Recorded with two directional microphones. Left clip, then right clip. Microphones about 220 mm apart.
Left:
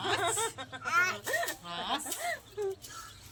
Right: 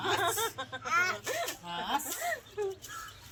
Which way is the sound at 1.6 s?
25° right (ahead or behind).